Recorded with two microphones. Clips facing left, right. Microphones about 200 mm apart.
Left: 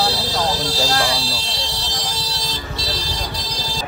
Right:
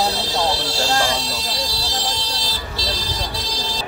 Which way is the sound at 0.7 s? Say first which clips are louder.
Even; 35° left (ahead or behind).